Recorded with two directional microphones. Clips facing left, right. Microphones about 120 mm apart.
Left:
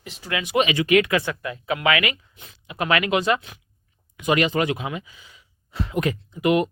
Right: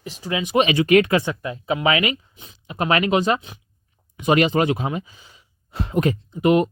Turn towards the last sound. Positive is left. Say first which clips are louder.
# right 3 dB
turn(degrees=-35)  # may be behind; listen again after turning